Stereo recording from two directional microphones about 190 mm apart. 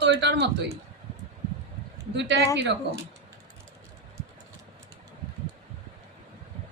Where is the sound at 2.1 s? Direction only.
65° right (ahead or behind).